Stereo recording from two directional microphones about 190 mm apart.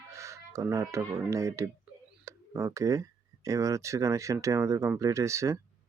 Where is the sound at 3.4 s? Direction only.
15° right (ahead or behind).